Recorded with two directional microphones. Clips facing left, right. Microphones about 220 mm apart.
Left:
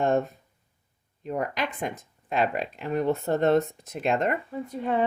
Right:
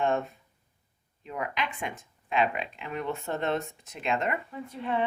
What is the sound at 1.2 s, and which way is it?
Speech, 45° left (ahead or behind).